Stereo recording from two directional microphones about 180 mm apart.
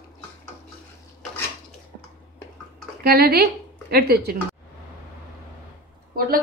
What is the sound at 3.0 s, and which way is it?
A woman's voice, 55° right (ahead or behind).